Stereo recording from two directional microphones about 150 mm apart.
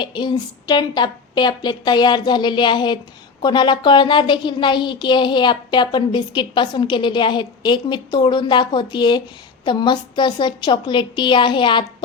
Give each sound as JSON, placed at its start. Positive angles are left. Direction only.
{"t": 0.0, "sound": "a woman's voice", "side_deg": 30}